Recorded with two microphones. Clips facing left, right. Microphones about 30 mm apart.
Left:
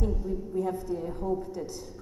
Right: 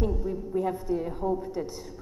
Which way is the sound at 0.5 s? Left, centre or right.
Centre.